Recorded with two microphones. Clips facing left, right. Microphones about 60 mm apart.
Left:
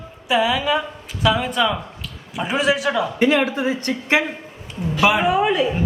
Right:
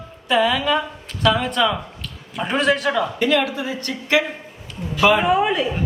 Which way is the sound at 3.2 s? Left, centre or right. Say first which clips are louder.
Left 2 dB; left.